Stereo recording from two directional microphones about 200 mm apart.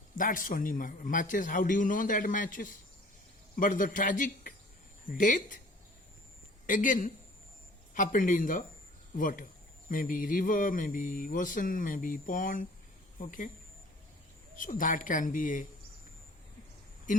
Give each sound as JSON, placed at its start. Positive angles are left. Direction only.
{"t": 0.2, "sound": "a man's voice", "side_deg": 45}
{"t": 6.7, "sound": "a man's voice", "side_deg": 40}
{"t": 9.9, "sound": "a sound", "side_deg": 45}
{"t": 13.1, "sound": "speech", "side_deg": 40}
{"t": 14.5, "sound": "a man's voice", "side_deg": 40}
{"t": 17.1, "sound": "speech", "side_deg": 40}